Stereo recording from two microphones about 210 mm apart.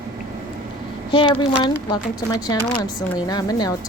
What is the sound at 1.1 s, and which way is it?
A woman's voice, 25° left (ahead or behind).